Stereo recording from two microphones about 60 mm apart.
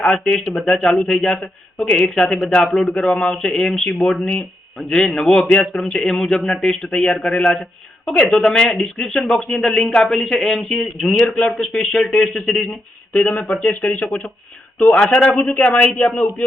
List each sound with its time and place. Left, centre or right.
0.0 s a man's voice: centre
5.5 s a man's voice: left
13.1 s a man's voice: left